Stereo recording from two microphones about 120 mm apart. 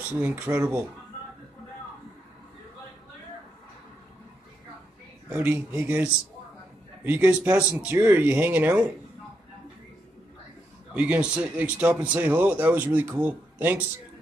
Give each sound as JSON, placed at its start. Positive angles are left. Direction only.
{"t": 0.2, "sound": "speech", "side_deg": -15}
{"t": 5.3, "sound": "speech", "side_deg": -15}
{"t": 7.1, "sound": "speech", "side_deg": -15}
{"t": 11.0, "sound": "speech", "side_deg": -10}